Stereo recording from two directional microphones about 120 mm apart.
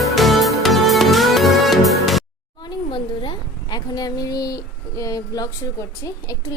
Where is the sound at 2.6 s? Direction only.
40° left (ahead or behind).